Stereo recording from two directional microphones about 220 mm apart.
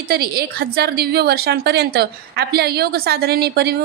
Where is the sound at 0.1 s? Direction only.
45° right (ahead or behind).